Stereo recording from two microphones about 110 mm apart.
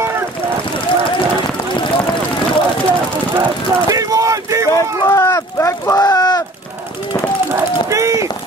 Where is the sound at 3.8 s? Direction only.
30° right (ahead or behind).